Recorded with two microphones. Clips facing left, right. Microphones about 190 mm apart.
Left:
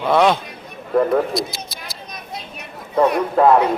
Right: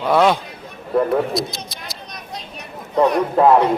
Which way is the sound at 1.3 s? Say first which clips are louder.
Even; centre (ahead or behind).